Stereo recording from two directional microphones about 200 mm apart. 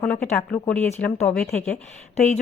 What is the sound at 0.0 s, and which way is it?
Speech, 5° left (ahead or behind).